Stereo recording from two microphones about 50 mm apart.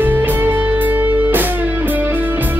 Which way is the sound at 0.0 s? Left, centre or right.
Right.